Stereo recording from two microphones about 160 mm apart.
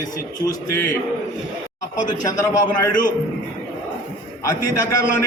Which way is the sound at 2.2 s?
25° left (ahead or behind).